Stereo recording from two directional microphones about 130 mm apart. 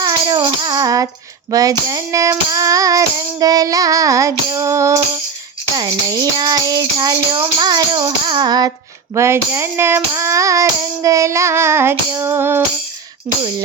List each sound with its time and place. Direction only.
0.0 s music: 30° right (ahead or behind)
1.5 s child singing: 30° right (ahead or behind)
9.1 s child singing: 20° right (ahead or behind)
12.2 s music: 20° right (ahead or behind)